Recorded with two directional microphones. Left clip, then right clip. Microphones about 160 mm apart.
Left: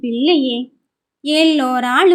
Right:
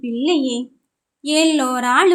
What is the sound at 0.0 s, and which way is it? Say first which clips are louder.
A woman's voice: left 4 dB; 20° left (ahead or behind).